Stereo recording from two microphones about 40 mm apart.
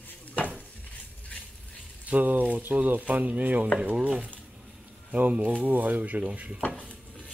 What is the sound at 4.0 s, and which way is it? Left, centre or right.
Stir, right.